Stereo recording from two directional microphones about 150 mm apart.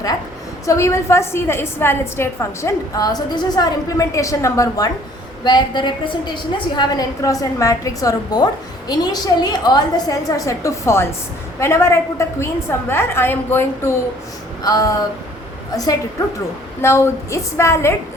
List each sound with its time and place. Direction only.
0.6 s a woman's voice: 20° left (ahead or behind)
14.6 s a woman's voice: 25° left (ahead or behind)